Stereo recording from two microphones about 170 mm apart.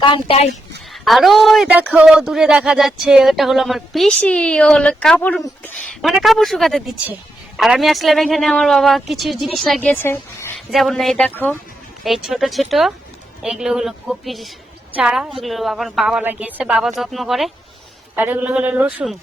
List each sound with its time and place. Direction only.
0.0 s a woman's voice: 30° left (ahead or behind)
1.0 s speech: centre (ahead or behind)
10.7 s a man's voice: centre (ahead or behind)
18.2 s a man's voice: 10° right (ahead or behind)